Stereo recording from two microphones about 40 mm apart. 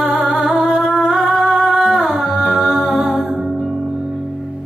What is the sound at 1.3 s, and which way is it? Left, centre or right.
Music, centre.